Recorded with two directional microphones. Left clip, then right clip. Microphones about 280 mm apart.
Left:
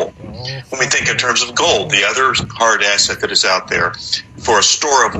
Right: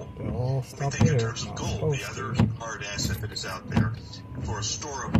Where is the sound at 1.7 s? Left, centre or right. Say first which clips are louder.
Left 16 dB; left.